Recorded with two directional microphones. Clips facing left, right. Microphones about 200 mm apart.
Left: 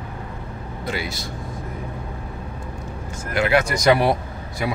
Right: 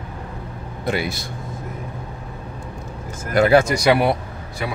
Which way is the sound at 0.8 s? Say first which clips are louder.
Right 5 dB; 55° right (ahead or behind).